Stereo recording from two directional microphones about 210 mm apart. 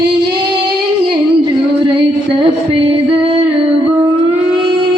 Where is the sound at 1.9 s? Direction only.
25° right (ahead or behind).